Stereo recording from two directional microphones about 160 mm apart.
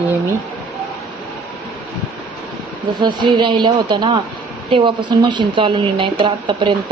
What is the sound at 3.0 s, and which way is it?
Speech, 30° right (ahead or behind).